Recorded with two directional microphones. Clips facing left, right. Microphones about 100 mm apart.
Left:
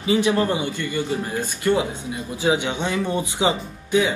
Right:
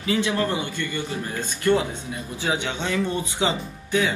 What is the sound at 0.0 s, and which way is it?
Speech, 20° left (ahead or behind).